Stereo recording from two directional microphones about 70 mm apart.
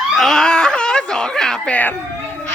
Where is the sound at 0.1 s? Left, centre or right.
Centre.